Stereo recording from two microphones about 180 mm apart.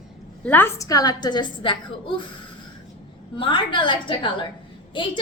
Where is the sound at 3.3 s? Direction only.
25° left (ahead or behind).